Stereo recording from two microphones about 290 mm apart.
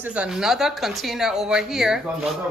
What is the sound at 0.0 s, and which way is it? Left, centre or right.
A woman's voice, centre.